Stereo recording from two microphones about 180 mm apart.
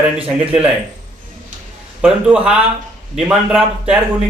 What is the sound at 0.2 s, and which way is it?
Speech, 5° right (ahead or behind).